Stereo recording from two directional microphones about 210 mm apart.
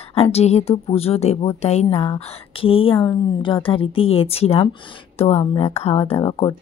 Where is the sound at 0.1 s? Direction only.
30° left (ahead or behind).